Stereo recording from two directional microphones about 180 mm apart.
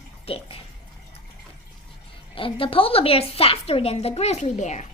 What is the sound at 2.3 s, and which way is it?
A child's voice, 30° left (ahead or behind).